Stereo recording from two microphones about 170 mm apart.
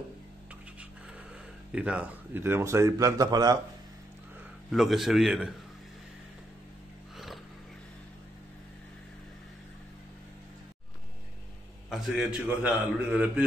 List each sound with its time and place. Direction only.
1.7 s a man's voice: 5° right (ahead or behind)
4.6 s a man's voice: centre (ahead or behind)
11.9 s a man's voice: 5° right (ahead or behind)